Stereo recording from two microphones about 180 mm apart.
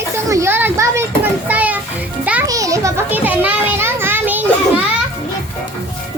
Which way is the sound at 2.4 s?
20° right (ahead or behind).